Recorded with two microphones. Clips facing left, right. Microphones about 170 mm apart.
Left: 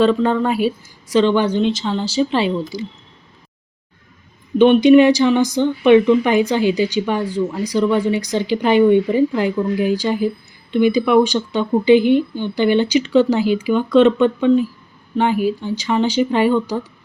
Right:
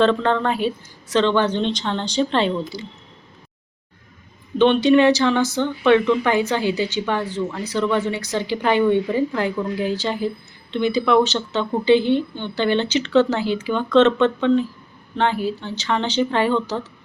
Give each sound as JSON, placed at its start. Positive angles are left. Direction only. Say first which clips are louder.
{"t": 0.0, "sound": "speech", "louder": "left 3 dB", "side_deg": 10}
{"t": 4.5, "sound": "speech", "louder": "left 5 dB", "side_deg": 10}